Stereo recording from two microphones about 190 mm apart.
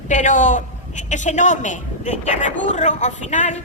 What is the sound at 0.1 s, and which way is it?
A man's voice, 40° left (ahead or behind).